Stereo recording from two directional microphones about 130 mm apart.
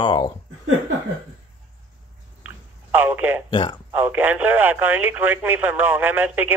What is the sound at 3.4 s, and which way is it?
Speech, 35° left (ahead or behind).